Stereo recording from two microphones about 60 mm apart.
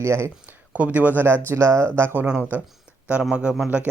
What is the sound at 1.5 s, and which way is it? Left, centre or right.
Speech, right.